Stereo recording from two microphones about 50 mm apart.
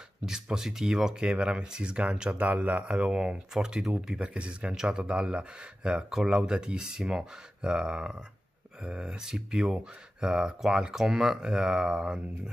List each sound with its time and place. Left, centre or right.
0.2 s speech: centre
3.2 s speech: centre